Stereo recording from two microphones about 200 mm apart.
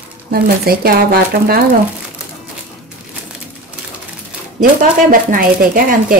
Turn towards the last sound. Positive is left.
turn(degrees=-45)  # may be behind; listen again after turning